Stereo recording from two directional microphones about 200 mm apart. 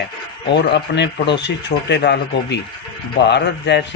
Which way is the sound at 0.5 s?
60° left (ahead or behind).